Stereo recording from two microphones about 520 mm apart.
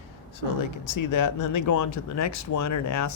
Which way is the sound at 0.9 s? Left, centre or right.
Left.